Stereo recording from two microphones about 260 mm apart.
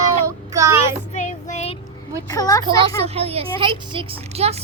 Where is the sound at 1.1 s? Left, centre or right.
Left.